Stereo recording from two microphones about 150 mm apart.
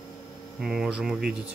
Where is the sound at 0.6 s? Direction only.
5° right (ahead or behind).